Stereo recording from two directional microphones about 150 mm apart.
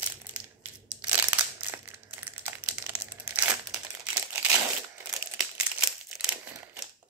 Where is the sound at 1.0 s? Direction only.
10° right (ahead or behind).